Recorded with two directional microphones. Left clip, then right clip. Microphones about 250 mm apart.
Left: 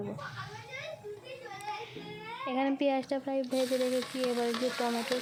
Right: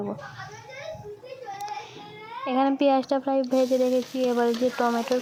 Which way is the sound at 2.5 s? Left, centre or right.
Centre.